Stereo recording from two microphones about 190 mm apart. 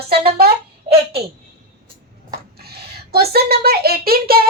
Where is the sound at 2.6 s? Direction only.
55° right (ahead or behind).